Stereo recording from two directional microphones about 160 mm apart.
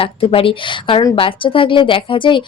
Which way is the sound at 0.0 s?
35° left (ahead or behind).